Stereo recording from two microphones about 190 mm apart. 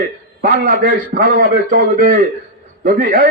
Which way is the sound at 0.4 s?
50° right (ahead or behind).